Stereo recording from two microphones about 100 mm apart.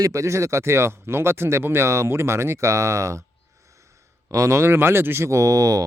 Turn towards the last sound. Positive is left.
turn(degrees=-35)  # may be behind; listen again after turning